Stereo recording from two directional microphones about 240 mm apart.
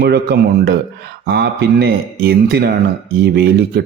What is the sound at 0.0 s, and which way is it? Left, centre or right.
A man's voice, right.